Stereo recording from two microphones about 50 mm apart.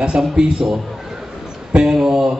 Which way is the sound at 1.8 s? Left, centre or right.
Centre.